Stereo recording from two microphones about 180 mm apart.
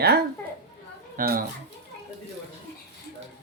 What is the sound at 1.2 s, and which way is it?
Speech, 55° right (ahead or behind).